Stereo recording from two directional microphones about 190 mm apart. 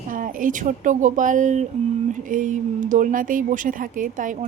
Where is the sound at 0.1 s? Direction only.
45° right (ahead or behind).